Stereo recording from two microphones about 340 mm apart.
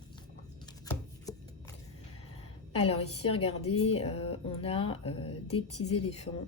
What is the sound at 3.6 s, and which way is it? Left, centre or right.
Speech, left.